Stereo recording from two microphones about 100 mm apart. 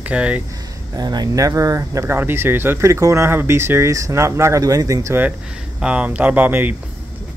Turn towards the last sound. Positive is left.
turn(degrees=-15)  # may be behind; listen again after turning